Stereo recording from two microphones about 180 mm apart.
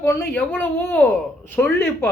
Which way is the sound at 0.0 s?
15° left (ahead or behind).